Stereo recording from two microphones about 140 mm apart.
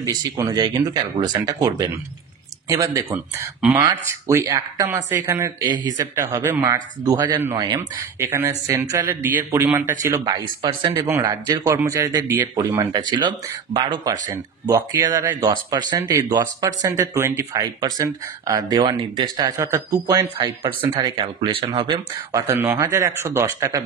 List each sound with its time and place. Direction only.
0.0 s speech: 25° right (ahead or behind)
8.2 s speech: 20° right (ahead or behind)
10.2 s speech: 35° right (ahead or behind)
11.0 s speech: 15° right (ahead or behind)
11.2 s speech: 25° right (ahead or behind)
14.3 s speech: 20° right (ahead or behind)
15.4 s speech: 30° right (ahead or behind)